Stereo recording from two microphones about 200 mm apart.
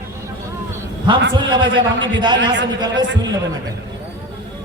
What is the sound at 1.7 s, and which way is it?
Speech, 65° right (ahead or behind).